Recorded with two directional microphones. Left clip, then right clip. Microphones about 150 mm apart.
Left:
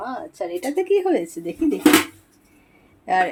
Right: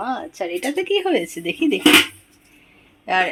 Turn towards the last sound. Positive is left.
turn(degrees=20)  # may be behind; listen again after turning